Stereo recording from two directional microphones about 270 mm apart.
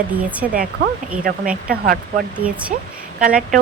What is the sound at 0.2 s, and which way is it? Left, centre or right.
Speech, centre.